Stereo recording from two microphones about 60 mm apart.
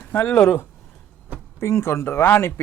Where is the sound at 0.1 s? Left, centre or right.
Left.